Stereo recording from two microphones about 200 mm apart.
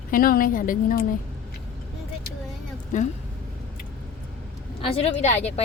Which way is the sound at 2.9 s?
40° left (ahead or behind).